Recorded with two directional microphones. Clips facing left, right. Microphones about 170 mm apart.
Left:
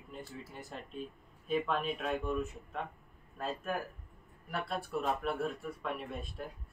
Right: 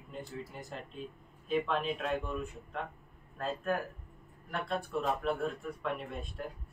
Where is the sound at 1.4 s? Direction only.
Centre (ahead or behind).